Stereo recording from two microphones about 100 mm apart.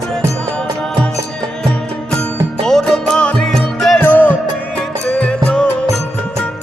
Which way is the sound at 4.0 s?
15° left (ahead or behind).